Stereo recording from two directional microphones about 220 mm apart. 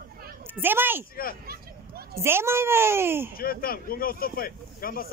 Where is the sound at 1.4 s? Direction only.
45° right (ahead or behind).